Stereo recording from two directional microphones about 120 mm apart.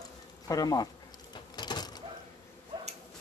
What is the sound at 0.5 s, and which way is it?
Speech, 30° left (ahead or behind).